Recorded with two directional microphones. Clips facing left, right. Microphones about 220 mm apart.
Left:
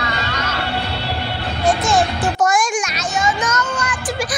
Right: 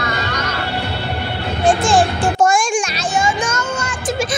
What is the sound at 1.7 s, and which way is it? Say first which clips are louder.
Music: right 3 dB; 30° right (ahead or behind).